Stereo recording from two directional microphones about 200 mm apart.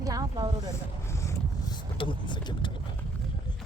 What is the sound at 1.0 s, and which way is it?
Vehicle, 15° left (ahead or behind).